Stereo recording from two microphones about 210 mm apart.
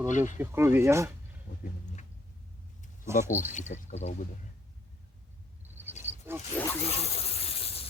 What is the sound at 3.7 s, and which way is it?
Speech, 30° left (ahead or behind).